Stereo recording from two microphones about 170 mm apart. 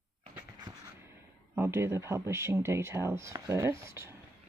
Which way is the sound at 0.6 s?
20° right (ahead or behind).